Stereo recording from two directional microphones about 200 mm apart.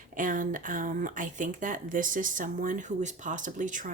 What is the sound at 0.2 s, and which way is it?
Speech, 40° right (ahead or behind).